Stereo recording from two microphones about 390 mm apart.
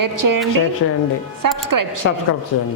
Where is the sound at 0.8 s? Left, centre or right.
Left.